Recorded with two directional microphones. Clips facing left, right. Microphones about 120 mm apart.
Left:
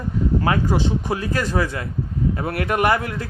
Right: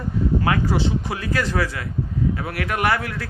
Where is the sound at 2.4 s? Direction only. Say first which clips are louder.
Left 4 dB; 30° left (ahead or behind).